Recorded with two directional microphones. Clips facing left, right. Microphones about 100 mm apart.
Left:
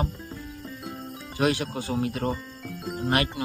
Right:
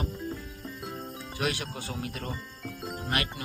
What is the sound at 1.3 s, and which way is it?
A man's voice, 35° left (ahead or behind).